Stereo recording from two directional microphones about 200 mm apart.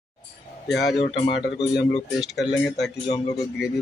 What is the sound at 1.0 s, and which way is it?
Speech, 30° left (ahead or behind).